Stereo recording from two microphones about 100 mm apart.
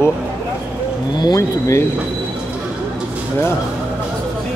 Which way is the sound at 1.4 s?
30° left (ahead or behind).